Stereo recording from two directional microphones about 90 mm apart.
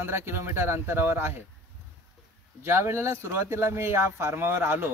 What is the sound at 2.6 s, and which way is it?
Speech, 30° right (ahead or behind).